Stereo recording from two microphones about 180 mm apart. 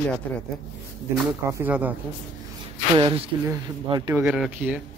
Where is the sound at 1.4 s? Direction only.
15° right (ahead or behind).